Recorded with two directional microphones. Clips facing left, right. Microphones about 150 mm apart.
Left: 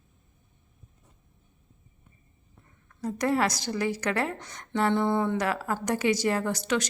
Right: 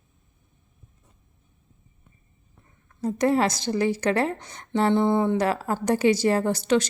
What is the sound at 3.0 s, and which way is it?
A woman's voice, 25° right (ahead or behind).